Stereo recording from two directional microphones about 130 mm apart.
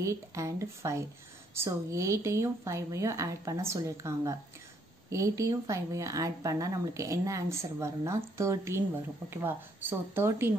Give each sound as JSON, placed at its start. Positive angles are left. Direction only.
{"t": 0.0, "sound": "speech", "side_deg": -25}